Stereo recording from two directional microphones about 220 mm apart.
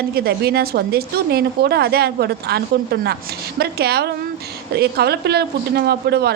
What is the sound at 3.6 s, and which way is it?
A woman's voice, 45° right (ahead or behind).